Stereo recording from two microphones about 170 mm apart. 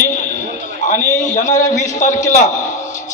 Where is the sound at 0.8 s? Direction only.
45° left (ahead or behind).